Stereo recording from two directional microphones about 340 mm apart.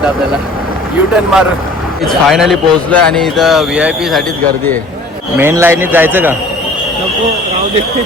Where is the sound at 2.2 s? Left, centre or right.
Centre.